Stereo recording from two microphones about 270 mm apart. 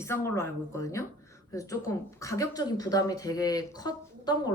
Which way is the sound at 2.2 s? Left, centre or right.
Centre.